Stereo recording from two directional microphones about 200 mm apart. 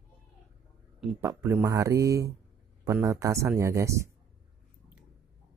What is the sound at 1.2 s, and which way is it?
Speech, 15° right (ahead or behind).